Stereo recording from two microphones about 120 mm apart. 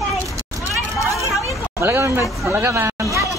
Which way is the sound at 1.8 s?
20° right (ahead or behind).